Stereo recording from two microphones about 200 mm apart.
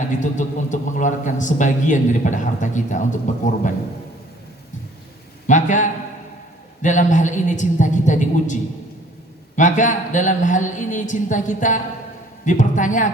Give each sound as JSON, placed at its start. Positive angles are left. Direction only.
{"t": 0.1, "sound": "a man's voice", "side_deg": 40}
{"t": 5.5, "sound": "a man's voice", "side_deg": 40}
{"t": 9.6, "sound": "a man's voice", "side_deg": 40}